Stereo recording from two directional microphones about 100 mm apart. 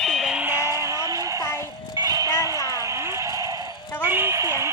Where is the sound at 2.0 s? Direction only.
40° right (ahead or behind).